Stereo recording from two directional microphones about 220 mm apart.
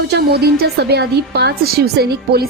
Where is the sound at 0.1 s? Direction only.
45° right (ahead or behind).